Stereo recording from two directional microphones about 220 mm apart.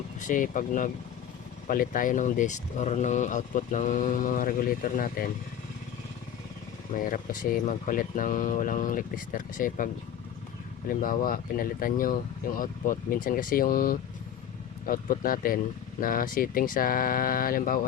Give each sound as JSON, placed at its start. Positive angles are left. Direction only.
{"t": 0.2, "sound": "speech", "side_deg": 35}
{"t": 6.9, "sound": "speech", "side_deg": 40}